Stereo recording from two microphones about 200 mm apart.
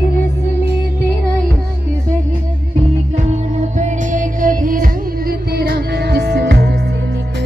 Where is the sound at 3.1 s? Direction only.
35° right (ahead or behind); by 6.7 s 55° right (ahead or behind).